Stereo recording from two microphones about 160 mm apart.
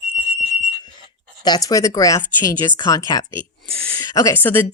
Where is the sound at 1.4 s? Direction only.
25° left (ahead or behind).